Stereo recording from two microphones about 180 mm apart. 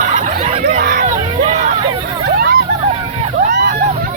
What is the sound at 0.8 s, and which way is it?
Hubbub, 65° right (ahead or behind).